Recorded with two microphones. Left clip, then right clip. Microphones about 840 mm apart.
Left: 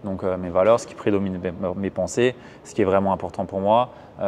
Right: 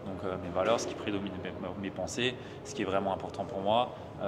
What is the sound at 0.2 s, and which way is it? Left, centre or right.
Speech, left.